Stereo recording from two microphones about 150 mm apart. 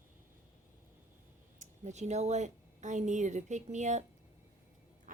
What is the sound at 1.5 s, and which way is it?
A woman's voice, 50° right (ahead or behind).